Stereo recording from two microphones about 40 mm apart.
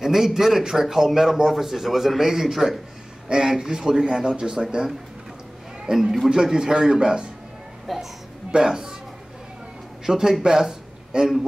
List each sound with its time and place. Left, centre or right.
0.0 s a man's voice: centre
4.8 s speech: right
5.9 s a man's voice: centre
7.8 s a woman's voice: centre
8.5 s a man's voice: centre
10.0 s a man's voice: centre